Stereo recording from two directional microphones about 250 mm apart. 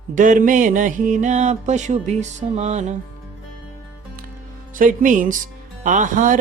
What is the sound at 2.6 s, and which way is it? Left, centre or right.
Music, right.